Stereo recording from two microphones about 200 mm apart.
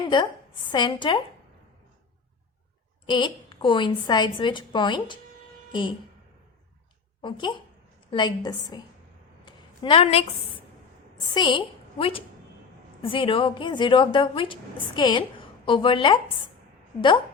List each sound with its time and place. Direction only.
0.0 s a woman's voice: 25° left (ahead or behind)
3.1 s a woman's voice: 25° left (ahead or behind)
7.2 s a woman's voice: 25° left (ahead or behind)
9.4 s a sound: 25° left (ahead or behind)
11.3 s a woman's voice: 25° left (ahead or behind)